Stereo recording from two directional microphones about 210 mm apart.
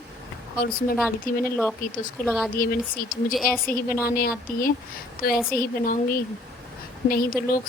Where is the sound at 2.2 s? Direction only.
Centre (ahead or behind).